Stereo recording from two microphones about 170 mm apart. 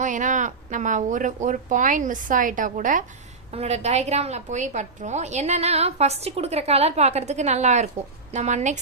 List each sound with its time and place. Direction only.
0.0 s speech: 50° right (ahead or behind)
3.5 s a woman's voice: 40° right (ahead or behind)